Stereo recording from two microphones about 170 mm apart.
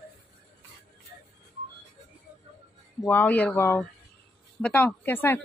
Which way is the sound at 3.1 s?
10° left (ahead or behind).